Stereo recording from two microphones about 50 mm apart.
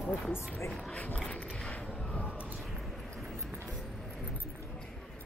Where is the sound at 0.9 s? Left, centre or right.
Left.